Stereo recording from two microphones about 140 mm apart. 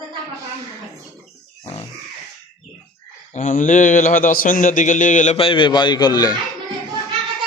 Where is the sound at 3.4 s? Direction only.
65° left (ahead or behind).